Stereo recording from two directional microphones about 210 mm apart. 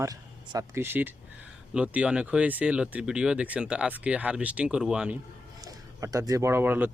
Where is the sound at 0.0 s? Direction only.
15° right (ahead or behind).